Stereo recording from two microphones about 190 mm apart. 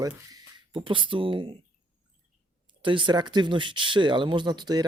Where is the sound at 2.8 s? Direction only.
25° right (ahead or behind).